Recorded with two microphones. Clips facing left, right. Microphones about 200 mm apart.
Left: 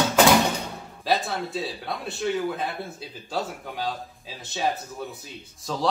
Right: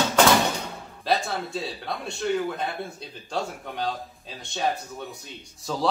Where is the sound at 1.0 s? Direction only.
Centre (ahead or behind).